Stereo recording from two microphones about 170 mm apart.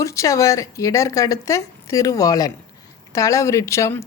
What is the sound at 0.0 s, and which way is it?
A woman's voice, 20° left (ahead or behind).